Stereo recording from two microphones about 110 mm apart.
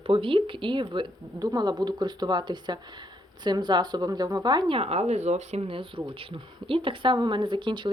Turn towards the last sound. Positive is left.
turn(degrees=-45)  # may be behind; listen again after turning